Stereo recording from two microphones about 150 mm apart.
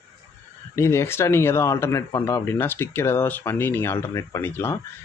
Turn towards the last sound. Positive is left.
turn(degrees=15)  # may be behind; listen again after turning